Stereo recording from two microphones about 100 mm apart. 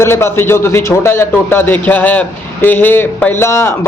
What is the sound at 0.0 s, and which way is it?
A man's voice, 25° left (ahead or behind).